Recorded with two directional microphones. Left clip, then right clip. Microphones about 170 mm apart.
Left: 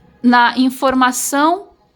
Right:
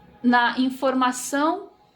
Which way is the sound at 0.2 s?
40° left (ahead or behind).